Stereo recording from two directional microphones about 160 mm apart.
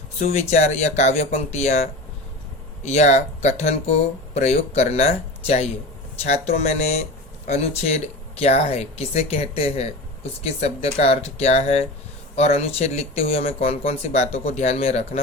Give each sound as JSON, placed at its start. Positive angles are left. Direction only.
{"t": 0.2, "sound": "speech", "side_deg": 45}